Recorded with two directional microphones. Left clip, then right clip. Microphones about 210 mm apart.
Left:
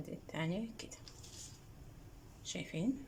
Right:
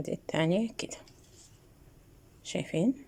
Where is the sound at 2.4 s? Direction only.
40° right (ahead or behind).